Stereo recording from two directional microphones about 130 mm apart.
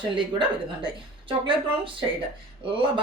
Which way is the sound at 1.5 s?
40° right (ahead or behind).